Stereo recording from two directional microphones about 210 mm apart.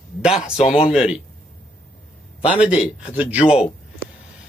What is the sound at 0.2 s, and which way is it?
A man's voice, 5° right (ahead or behind).